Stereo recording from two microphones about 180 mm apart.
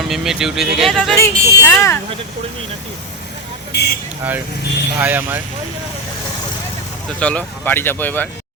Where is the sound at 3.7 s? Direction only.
65° left (ahead or behind).